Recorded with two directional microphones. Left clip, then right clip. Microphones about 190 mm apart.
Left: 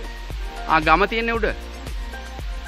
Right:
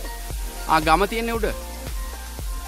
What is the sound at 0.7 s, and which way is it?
Speech, 20° right (ahead or behind).